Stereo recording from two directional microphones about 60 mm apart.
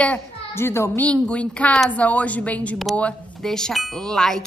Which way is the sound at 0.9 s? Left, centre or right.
Centre.